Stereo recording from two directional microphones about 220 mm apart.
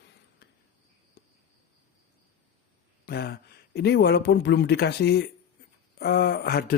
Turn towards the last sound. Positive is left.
turn(degrees=45)  # may be behind; listen again after turning